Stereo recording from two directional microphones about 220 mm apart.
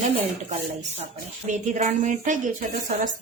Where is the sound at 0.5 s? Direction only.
30° right (ahead or behind).